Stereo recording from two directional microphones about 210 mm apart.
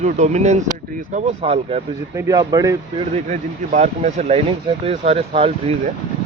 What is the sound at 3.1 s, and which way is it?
Speech, 35° right (ahead or behind).